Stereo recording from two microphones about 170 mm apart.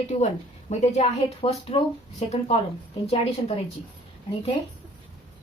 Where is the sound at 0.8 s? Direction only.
40° left (ahead or behind).